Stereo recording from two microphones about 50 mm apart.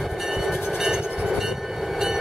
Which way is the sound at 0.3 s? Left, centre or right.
Centre.